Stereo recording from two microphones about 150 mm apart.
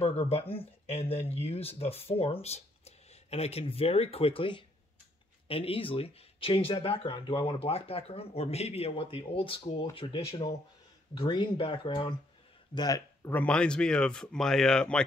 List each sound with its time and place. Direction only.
0.0 s speech: 40° left (ahead or behind); by 13.3 s 25° left (ahead or behind)
13.3 s speech: 10° left (ahead or behind)